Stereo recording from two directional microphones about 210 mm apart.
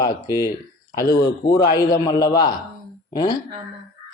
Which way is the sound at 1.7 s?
15° left (ahead or behind).